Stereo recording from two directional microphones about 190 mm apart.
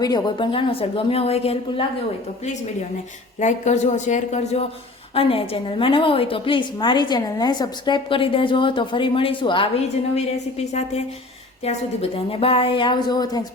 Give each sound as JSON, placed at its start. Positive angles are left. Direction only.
{"t": 0.0, "sound": "a woman's voice", "side_deg": 20}
{"t": 3.4, "sound": "a woman's voice", "side_deg": 40}
{"t": 12.1, "sound": "a woman's voice", "side_deg": 30}